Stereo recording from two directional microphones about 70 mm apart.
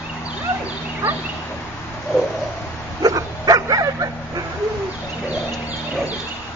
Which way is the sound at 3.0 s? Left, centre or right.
Right.